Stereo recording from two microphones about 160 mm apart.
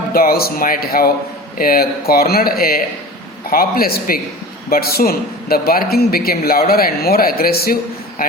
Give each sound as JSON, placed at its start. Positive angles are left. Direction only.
{"t": 0.1, "sound": "a man's voice", "side_deg": 70}